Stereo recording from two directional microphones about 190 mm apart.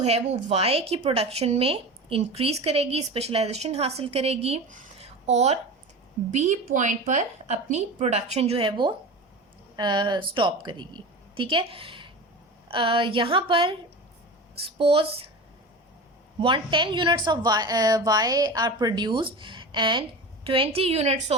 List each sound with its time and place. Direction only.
0.4 s a woman's voice: 30° right (ahead or behind)
14.8 s a woman's voice: 30° right (ahead or behind)
16.4 s a woman's voice: 25° right (ahead or behind)